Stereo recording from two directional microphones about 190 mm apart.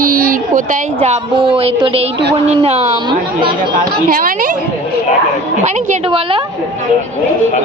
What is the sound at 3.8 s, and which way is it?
Speech, 45° right (ahead or behind).